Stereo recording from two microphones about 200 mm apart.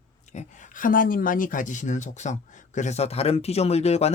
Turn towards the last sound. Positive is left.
turn(degrees=30)  # may be behind; listen again after turning